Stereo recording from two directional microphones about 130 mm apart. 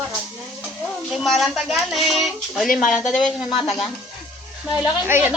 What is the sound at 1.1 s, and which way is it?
Speech, centre (ahead or behind).